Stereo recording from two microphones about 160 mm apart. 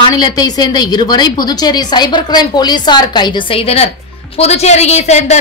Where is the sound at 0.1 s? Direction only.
25° left (ahead or behind).